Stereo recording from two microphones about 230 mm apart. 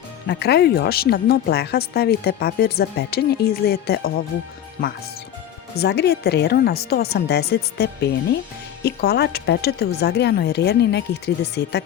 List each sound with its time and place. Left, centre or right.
0.3 s a woman's voice: left
5.7 s a woman's voice: left